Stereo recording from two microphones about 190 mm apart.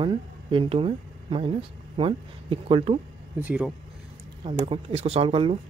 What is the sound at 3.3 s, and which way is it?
Speech, 5° right (ahead or behind).